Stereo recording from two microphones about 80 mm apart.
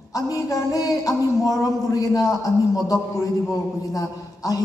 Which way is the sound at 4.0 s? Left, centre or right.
Left.